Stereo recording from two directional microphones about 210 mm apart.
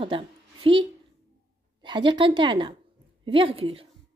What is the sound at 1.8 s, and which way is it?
A woman's voice, 20° right (ahead or behind).